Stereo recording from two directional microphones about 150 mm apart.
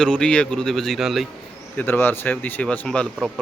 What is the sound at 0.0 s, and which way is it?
Speech, 5° left (ahead or behind).